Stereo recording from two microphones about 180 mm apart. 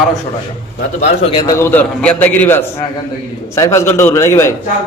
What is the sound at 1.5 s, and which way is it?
A man's voice, 15° left (ahead or behind).